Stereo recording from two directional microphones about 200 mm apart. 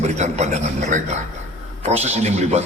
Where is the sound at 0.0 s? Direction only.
35° right (ahead or behind).